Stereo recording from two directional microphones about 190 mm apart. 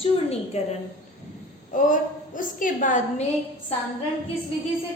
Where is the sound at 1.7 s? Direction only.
45° left (ahead or behind).